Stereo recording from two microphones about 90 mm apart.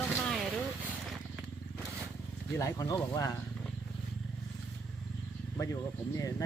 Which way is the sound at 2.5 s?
40° left (ahead or behind).